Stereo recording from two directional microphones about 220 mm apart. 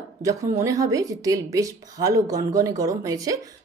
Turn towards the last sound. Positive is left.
turn(degrees=-15)  # may be behind; listen again after turning